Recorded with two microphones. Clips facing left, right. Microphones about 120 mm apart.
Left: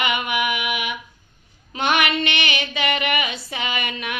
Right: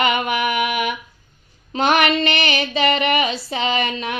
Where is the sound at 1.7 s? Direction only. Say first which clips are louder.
Right 4 dB; 35° right (ahead or behind).